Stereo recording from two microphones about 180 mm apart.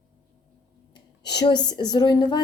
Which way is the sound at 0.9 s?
20° left (ahead or behind).